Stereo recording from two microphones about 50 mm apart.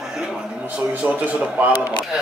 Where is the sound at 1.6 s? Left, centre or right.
Right.